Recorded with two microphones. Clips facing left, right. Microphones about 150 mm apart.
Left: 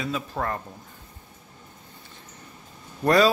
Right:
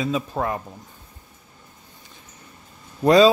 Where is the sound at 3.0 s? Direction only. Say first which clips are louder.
Right 5 dB; 20° right (ahead or behind).